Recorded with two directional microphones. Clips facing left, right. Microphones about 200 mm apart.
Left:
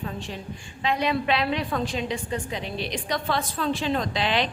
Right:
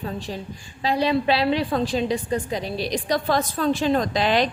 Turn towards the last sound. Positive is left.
turn(degrees=-45)  # may be behind; listen again after turning